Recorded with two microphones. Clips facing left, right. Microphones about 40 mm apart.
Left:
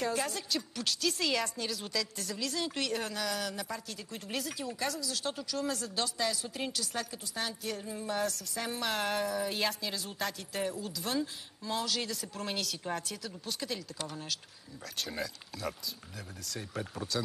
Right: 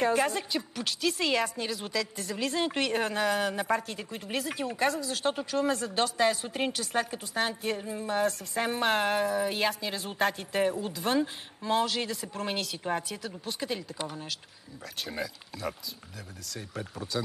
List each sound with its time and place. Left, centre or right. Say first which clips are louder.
0.0 s a woman's voice: right 7 dB; right; by 2.3 s centre
2.3 s speech: right 6 dB; right
4.1 s a woman's voice: right 4 dB; centre
4.6 s speech: right 7 dB; right
7.7 s speech: right 5 dB; right
8.3 s speech: right 7 dB; right
9.0 s speech: right 5 dB; right
9.9 s speech: right 8 dB; right
11.9 s a woman's voice: right 3 dB; centre
14.1 s a woman's voice: right 1 dB; centre